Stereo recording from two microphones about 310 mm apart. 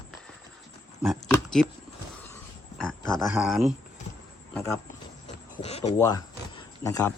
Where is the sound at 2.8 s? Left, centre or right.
Centre.